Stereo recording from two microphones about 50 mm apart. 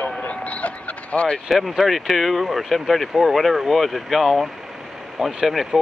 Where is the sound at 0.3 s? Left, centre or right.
Left.